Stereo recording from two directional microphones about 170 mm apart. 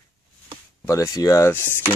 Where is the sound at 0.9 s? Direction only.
20° left (ahead or behind).